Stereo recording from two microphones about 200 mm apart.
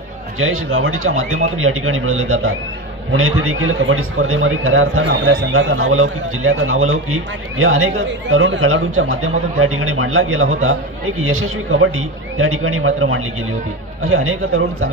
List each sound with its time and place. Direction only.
0.4 s a man's voice: 90° right